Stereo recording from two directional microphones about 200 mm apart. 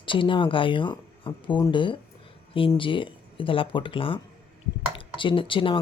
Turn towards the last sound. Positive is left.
turn(degrees=25)  # may be behind; listen again after turning